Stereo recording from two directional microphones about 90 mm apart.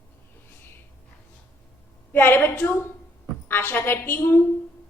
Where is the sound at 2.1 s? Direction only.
25° left (ahead or behind).